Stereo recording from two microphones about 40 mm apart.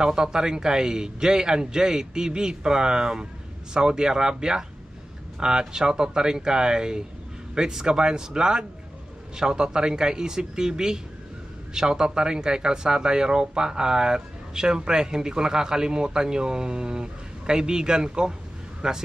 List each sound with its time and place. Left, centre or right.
0.0 s speech: centre